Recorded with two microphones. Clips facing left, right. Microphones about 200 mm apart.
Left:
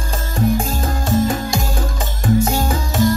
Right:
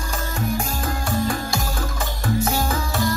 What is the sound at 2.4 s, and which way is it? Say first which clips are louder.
Music: left 4 dB; 15° left (ahead or behind).